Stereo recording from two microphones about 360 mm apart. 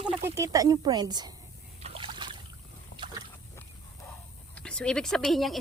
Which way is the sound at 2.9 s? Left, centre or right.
Left.